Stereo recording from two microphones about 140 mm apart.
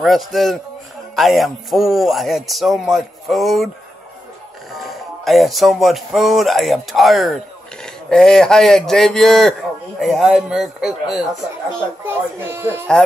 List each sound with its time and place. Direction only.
0.0 s speech: centre (ahead or behind)
4.7 s speech: centre (ahead or behind)
12.1 s speech: 15° right (ahead or behind)